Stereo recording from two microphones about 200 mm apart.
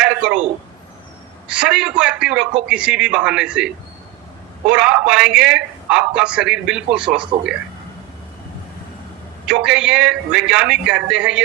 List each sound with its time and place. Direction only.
0.0 s a sound: 5° right (ahead or behind)
1.5 s a man's voice: 5° right (ahead or behind)
4.7 s a man's voice: 5° right (ahead or behind)
9.5 s a man's voice: 5° right (ahead or behind)